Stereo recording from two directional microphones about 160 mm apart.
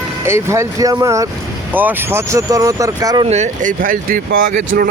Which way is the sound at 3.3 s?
50° right (ahead or behind).